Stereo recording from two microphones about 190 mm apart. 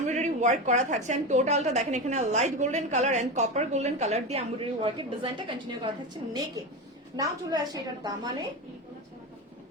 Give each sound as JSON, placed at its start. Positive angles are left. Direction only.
{"t": 0.1, "sound": "a woman's voice", "side_deg": -40}
{"t": 7.2, "sound": "a woman's voice", "side_deg": -20}